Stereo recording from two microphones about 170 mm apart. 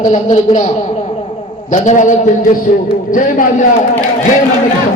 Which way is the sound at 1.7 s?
45° left (ahead or behind).